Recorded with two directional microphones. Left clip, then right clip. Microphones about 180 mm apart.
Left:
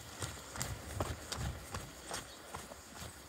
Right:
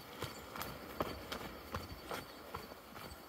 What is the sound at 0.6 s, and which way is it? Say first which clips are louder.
Clip-clop: even; 50° left (ahead or behind).